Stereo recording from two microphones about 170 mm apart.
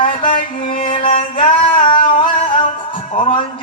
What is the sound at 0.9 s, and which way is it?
Music, 30° left (ahead or behind).